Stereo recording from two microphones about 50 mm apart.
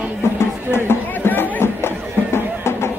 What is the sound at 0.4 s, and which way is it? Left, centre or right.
Music, left.